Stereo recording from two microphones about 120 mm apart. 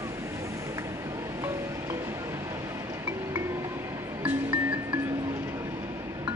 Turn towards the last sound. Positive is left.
turn(degrees=-10)  # may be behind; listen again after turning